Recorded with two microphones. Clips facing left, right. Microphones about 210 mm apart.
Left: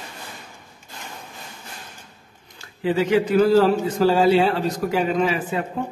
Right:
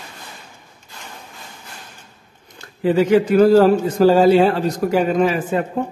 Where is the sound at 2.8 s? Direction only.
45° right (ahead or behind).